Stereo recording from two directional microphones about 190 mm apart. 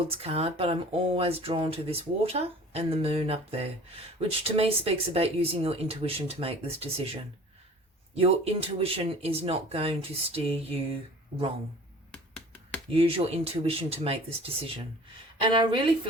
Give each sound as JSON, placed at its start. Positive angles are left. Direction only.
{"t": 0.1, "sound": "speech", "side_deg": -30}
{"t": 12.1, "sound": "finger snapping", "side_deg": 5}
{"t": 12.9, "sound": "a woman's voice", "side_deg": -30}